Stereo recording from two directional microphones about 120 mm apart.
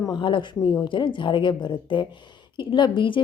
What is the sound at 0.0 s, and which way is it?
A woman's voice, 40° left (ahead or behind).